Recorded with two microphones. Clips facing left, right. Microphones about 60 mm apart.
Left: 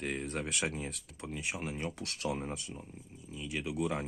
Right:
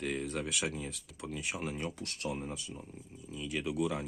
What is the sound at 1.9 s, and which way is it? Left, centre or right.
Speech, left.